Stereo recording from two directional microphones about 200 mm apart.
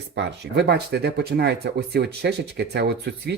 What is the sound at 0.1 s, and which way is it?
Speech, 60° right (ahead or behind).